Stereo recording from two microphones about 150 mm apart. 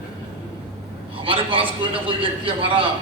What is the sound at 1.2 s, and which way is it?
A man's voice, 35° right (ahead or behind).